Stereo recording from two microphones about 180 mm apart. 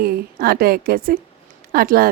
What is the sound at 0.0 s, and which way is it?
A woman's voice, 55° right (ahead or behind).